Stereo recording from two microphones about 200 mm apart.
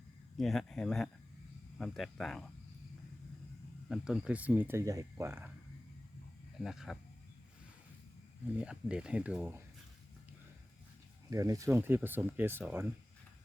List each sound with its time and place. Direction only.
0.3 s speech: centre (ahead or behind)
3.8 s speech: centre (ahead or behind)
6.6 s speech: centre (ahead or behind)
8.5 s speech: 5° right (ahead or behind)
11.3 s speech: 15° right (ahead or behind)